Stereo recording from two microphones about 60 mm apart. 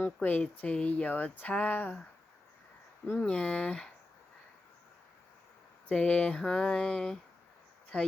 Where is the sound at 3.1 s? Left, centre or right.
Centre.